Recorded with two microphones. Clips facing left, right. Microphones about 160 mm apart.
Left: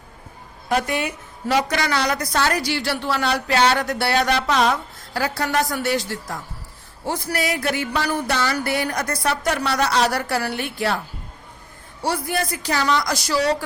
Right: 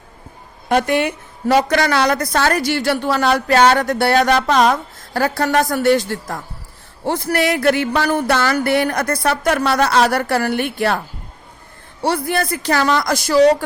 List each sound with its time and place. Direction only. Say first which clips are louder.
0.7 s a woman's voice: right 6 dB; 65° right (ahead or behind)
12.0 s a woman's voice: right 5 dB; 60° right (ahead or behind)